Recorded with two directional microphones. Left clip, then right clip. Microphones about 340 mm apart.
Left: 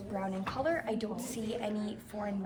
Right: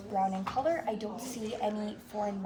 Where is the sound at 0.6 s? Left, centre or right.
Centre.